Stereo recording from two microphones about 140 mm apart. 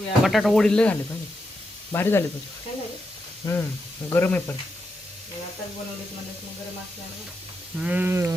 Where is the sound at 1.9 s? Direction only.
15° left (ahead or behind).